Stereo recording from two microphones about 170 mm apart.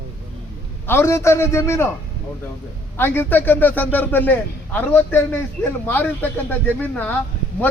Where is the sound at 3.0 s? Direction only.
15° left (ahead or behind).